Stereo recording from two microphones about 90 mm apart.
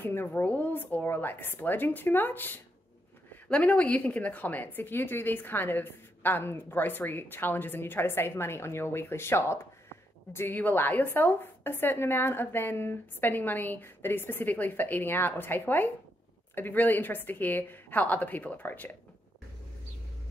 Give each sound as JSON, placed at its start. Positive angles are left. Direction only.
{"t": 0.0, "sound": "a woman's voice", "side_deg": 25}